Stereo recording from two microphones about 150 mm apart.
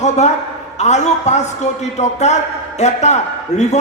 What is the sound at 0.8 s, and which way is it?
A man's voice, 50° left (ahead or behind).